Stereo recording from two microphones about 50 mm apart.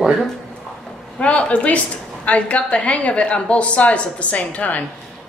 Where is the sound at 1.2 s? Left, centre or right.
Left.